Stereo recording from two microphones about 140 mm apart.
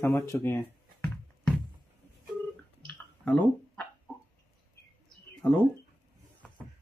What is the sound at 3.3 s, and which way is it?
Speech, 10° left (ahead or behind).